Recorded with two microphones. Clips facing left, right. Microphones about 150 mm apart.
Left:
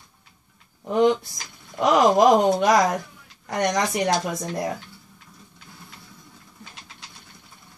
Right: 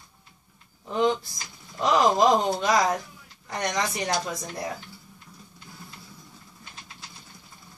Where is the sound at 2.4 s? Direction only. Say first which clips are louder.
Left 6 dB; 70° left (ahead or behind).